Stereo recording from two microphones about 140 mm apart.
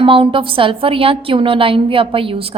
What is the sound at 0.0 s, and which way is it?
A woman's voice, 40° right (ahead or behind).